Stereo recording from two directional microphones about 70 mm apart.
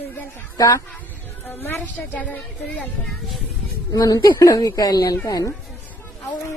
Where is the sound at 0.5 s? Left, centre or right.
Left.